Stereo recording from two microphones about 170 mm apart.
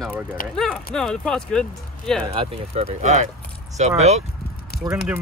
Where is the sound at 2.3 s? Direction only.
35° right (ahead or behind).